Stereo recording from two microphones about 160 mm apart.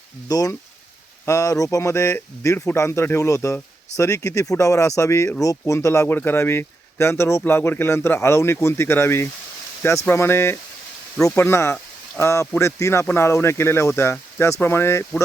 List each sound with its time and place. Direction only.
0.3 s a man's voice: 25° left (ahead or behind)